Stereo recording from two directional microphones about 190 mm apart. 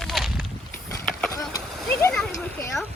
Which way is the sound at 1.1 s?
5° left (ahead or behind).